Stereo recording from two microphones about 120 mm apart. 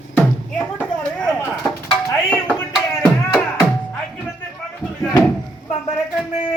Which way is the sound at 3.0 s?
10° left (ahead or behind).